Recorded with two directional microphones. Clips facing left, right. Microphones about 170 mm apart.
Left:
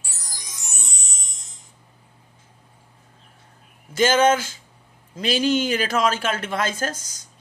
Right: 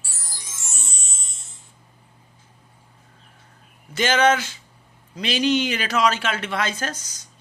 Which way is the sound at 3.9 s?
45° left (ahead or behind).